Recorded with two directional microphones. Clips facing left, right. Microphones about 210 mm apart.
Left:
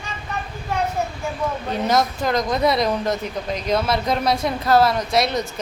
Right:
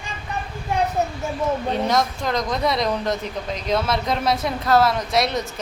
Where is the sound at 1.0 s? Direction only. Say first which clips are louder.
Right 2 dB; 20° right (ahead or behind).